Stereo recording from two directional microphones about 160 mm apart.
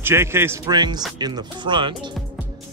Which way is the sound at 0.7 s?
25° right (ahead or behind).